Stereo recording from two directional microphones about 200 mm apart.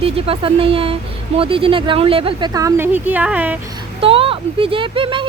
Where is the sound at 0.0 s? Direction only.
30° right (ahead or behind); by 3.6 s 5° right (ahead or behind).